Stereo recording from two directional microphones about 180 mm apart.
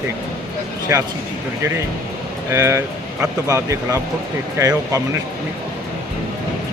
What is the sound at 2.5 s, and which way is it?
Speech, 15° right (ahead or behind).